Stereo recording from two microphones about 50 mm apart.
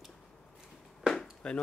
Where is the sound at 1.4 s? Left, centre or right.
Centre.